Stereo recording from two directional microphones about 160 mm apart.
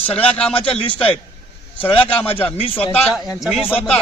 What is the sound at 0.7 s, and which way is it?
Speech, 35° left (ahead or behind).